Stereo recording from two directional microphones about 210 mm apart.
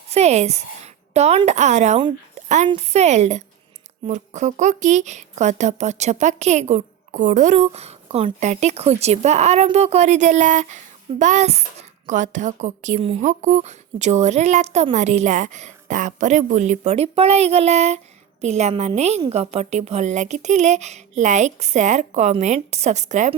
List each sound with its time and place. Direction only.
0.1 s a woman's voice: 30° right (ahead or behind)